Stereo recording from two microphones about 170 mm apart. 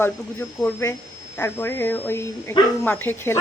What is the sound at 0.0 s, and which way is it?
Speech, 15° left (ahead or behind).